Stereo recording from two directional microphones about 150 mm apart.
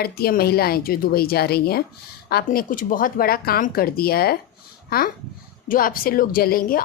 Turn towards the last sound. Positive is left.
turn(degrees=75)  # may be behind; listen again after turning